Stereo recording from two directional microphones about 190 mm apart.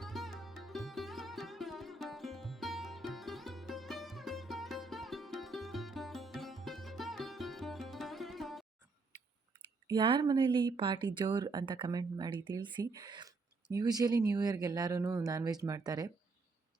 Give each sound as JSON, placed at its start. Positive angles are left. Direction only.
{"t": 0.0, "sound": "sitar", "side_deg": 0}
{"t": 9.8, "sound": "speech", "side_deg": -25}